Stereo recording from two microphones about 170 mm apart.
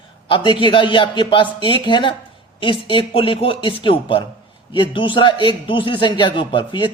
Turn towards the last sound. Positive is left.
turn(degrees=30)  # may be behind; listen again after turning